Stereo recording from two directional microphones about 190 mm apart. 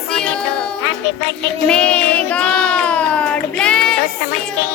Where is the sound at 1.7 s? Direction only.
5° left (ahead or behind).